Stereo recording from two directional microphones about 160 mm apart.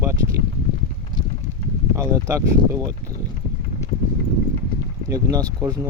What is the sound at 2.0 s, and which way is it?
Speech, 20° right (ahead or behind).